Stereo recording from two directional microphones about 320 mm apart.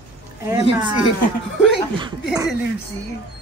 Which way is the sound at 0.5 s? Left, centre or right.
Centre.